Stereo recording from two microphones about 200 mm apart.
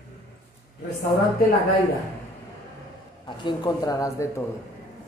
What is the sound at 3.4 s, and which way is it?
Speech, 20° left (ahead or behind).